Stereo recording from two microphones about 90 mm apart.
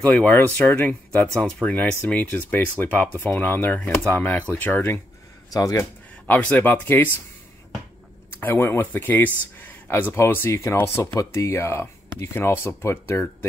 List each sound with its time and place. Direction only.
0.0 s speech: 15° left (ahead or behind)
5.5 s speech: 40° left (ahead or behind)
5.8 s speech: 20° left (ahead or behind)
8.3 s speech: 25° left (ahead or behind)